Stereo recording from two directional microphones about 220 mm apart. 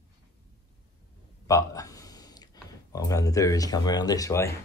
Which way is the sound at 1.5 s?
15° left (ahead or behind).